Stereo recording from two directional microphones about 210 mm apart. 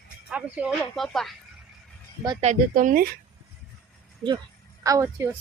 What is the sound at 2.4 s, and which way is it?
Speech, 35° right (ahead or behind).